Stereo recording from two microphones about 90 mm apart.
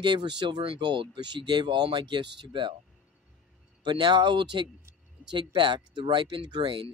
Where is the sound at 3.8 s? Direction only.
55° right (ahead or behind).